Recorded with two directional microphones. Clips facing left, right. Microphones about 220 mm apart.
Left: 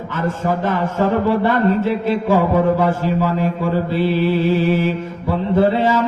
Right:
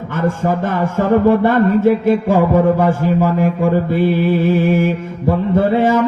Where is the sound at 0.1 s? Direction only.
50° right (ahead or behind).